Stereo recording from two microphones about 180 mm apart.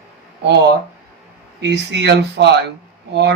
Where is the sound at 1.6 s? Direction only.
75° right (ahead or behind).